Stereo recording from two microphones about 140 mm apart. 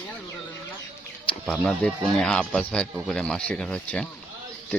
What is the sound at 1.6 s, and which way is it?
Speech, 5° left (ahead or behind).